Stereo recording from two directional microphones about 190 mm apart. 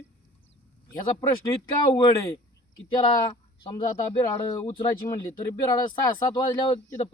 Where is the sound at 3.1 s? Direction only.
25° left (ahead or behind).